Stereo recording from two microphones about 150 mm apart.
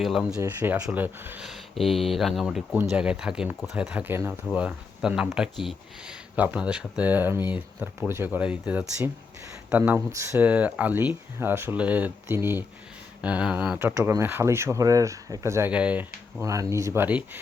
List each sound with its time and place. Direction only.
0.0 s speech: centre (ahead or behind)
0.4 s speech: 15° right (ahead or behind)
1.5 s speech: centre (ahead or behind)
16.4 s speech: 20° right (ahead or behind)